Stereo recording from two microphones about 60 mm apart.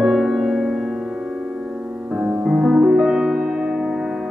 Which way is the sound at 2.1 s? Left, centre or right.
Centre.